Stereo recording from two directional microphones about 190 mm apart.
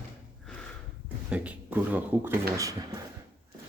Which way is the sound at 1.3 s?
5° right (ahead or behind).